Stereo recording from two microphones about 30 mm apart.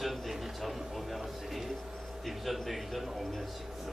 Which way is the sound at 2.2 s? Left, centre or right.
Centre.